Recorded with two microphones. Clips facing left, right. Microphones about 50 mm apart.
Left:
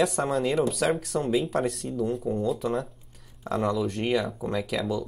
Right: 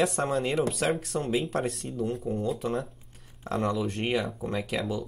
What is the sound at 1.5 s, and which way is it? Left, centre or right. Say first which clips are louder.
Speech: left 3 dB; centre.